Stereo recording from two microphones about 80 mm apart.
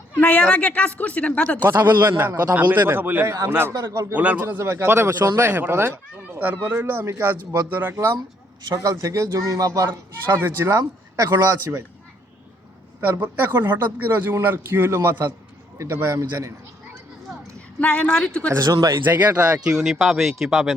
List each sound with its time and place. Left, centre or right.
0.1 s a woman's voice: left
1.8 s a man's voice: right
3.7 s speech: right
4.1 s a man's voice: centre
4.4 s a man's voice: right
8.7 s speech: right
13.0 s a man's voice: right
17.7 s a woman's voice: centre
18.6 s speech: right
19.0 s a man's voice: right
19.6 s speech: centre